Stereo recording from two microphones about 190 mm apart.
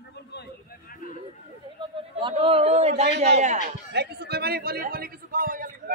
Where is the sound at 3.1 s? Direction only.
60° right (ahead or behind).